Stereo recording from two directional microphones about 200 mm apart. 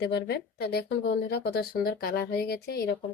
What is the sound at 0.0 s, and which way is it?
Speech, 55° left (ahead or behind).